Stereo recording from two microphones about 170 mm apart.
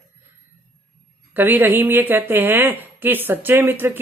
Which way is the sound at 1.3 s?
10° right (ahead or behind).